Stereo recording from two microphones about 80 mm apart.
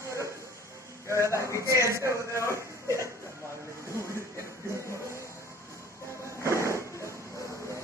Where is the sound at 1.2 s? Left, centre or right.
Right.